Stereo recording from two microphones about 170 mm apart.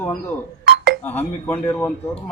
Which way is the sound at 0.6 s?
75° right (ahead or behind).